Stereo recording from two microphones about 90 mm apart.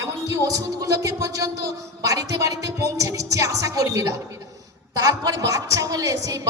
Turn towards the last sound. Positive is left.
turn(degrees=-40)  # may be behind; listen again after turning